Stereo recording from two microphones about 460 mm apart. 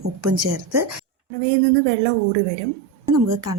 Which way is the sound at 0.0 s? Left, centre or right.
Right.